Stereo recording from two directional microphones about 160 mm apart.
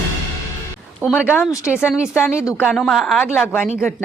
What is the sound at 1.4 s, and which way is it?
Speech, 20° left (ahead or behind).